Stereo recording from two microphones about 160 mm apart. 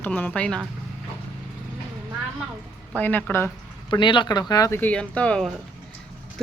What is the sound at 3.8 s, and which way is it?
Speech, 30° left (ahead or behind).